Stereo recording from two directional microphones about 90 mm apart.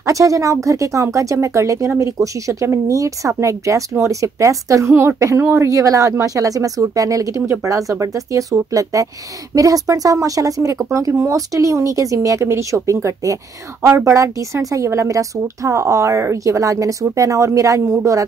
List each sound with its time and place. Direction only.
0.0 s speech: 40° right (ahead or behind)